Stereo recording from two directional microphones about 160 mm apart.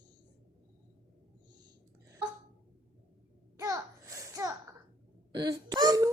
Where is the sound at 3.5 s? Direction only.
20° right (ahead or behind).